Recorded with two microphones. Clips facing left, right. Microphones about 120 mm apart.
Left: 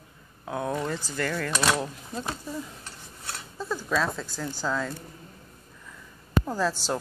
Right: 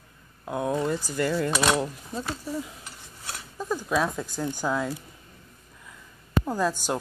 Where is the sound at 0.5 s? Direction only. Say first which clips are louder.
Right 3 dB; 5° right (ahead or behind).